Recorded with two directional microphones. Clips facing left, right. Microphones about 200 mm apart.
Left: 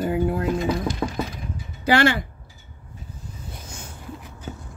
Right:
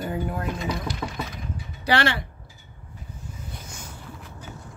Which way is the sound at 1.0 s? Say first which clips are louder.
Left 6 dB; 30° left (ahead or behind).